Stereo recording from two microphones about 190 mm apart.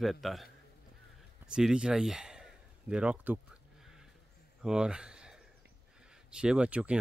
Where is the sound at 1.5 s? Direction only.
5° right (ahead or behind).